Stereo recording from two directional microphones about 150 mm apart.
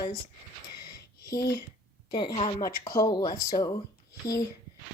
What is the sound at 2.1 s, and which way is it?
Speech, 35° left (ahead or behind).